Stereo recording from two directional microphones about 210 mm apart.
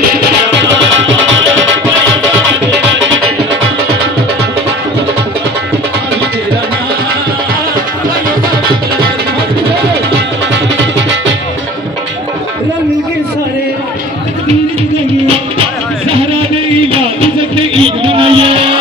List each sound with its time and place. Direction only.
16.1 s music: 25° right (ahead or behind)